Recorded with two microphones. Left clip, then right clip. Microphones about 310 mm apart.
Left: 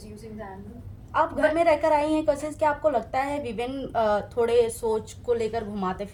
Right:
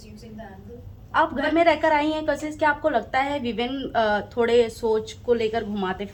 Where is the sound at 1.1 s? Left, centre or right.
Left.